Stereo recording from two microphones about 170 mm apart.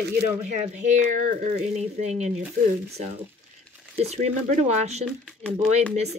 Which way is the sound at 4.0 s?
40° right (ahead or behind).